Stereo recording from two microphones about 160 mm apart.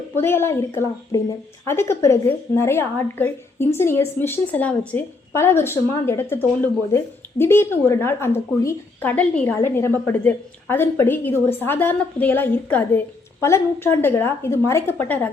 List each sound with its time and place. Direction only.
0.2 s a woman's voice: 15° left (ahead or behind)